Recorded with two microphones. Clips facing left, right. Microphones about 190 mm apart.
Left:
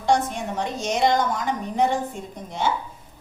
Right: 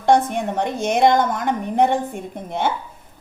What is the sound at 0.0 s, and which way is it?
A woman's voice, 55° right (ahead or behind).